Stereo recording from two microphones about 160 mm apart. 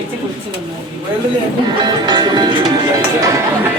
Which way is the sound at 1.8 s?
25° right (ahead or behind).